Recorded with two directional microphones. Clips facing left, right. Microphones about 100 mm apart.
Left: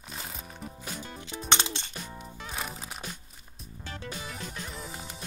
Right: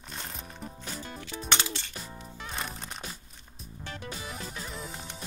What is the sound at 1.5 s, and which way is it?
Music, 20° left (ahead or behind).